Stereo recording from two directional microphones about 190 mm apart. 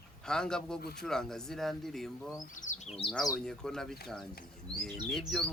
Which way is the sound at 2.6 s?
40° left (ahead or behind).